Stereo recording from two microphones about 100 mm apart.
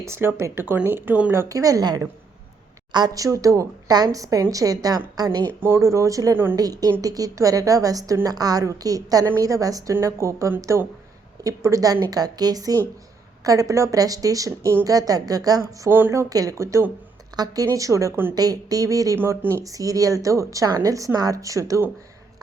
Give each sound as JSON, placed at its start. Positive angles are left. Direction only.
{"t": 0.0, "sound": "speech", "side_deg": -25}
{"t": 1.3, "sound": "a woman's voice", "side_deg": -30}
{"t": 5.5, "sound": "a woman's voice", "side_deg": -25}
{"t": 6.3, "sound": "speech", "side_deg": -20}
{"t": 6.6, "sound": "a woman's voice", "side_deg": -40}
{"t": 15.9, "sound": "speech", "side_deg": -20}
{"t": 16.3, "sound": "a woman's voice", "side_deg": -35}
{"t": 19.2, "sound": "a woman's voice", "side_deg": -25}